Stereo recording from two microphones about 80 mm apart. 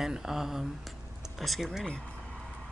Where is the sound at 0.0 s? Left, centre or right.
Centre.